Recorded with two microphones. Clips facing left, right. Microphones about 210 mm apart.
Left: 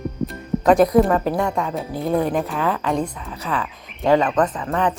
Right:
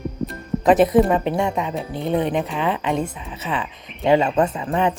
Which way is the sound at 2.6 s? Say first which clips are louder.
Even; 20° right (ahead or behind).